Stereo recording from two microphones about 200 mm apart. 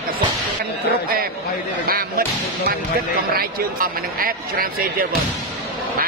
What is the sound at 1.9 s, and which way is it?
Slam, 50° right (ahead or behind).